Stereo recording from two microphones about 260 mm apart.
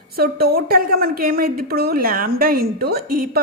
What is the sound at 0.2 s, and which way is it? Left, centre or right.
A woman's voice, right.